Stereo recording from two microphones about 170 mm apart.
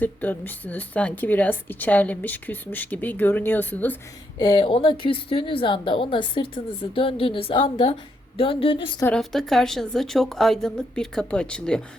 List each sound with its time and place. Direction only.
0.0 s speech: 10° left (ahead or behind)
4.4 s a woman's voice: 30° left (ahead or behind)
9.0 s speech: 5° left (ahead or behind)